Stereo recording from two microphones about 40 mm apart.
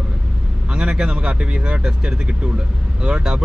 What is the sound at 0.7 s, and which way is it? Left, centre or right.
Speech, right.